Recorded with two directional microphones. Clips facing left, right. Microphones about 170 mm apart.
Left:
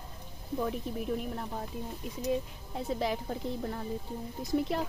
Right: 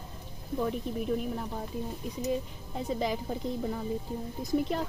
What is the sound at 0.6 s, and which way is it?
Speech, centre (ahead or behind).